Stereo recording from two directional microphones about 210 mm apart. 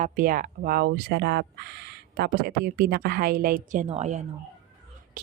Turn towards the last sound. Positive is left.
turn(degrees=-30)  # may be behind; listen again after turning